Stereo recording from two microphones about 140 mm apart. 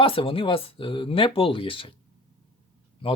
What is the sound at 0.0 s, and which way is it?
Speech, 40° left (ahead or behind).